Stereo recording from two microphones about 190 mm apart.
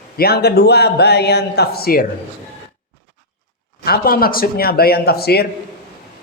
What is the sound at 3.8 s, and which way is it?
Speech, 55° left (ahead or behind).